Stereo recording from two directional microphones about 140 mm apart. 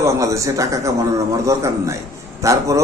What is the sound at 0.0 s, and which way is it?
A man's voice, 20° right (ahead or behind).